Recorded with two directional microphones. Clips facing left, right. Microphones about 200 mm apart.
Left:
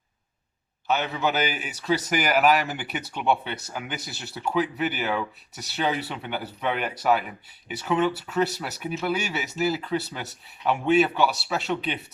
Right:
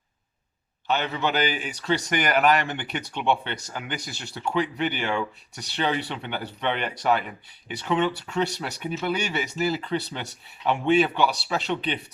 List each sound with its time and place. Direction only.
0.9 s a man's voice: 5° left (ahead or behind)